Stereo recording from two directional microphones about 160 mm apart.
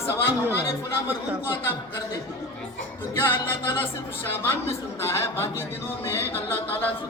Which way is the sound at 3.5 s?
15° left (ahead or behind).